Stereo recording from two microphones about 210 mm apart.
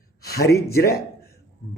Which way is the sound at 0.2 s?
50° left (ahead or behind).